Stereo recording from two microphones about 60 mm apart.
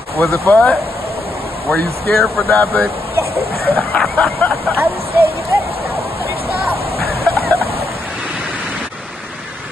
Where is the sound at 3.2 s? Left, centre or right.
Right.